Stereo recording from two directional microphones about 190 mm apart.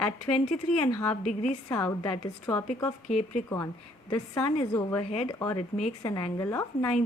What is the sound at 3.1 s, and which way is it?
Speech, 40° left (ahead or behind).